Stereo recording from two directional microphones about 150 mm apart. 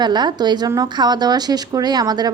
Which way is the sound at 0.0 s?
30° right (ahead or behind).